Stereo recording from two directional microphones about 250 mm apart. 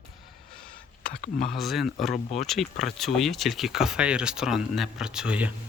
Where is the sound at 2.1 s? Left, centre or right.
Left.